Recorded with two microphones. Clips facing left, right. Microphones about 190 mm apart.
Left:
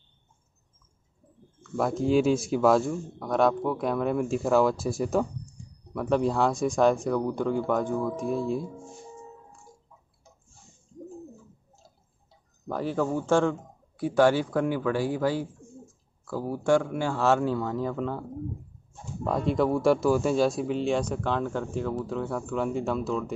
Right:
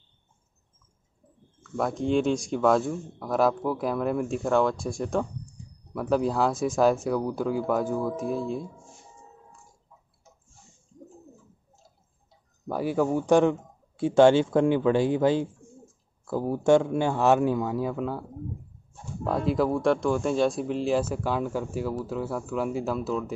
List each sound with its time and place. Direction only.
1.6 s speech: centre (ahead or behind)
5.6 s a sound: centre (ahead or behind)
5.9 s speech: centre (ahead or behind)
12.6 s a man's voice: 10° right (ahead or behind)
19.2 s speech: centre (ahead or behind)